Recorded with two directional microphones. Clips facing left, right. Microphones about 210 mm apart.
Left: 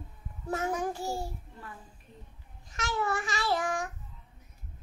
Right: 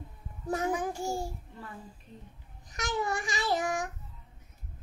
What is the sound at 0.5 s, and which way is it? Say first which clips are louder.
Child singing: right 1 dB; 15° right (ahead or behind).